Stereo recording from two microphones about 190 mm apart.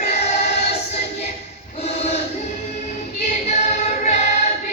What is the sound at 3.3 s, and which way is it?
Choir, 40° left (ahead or behind).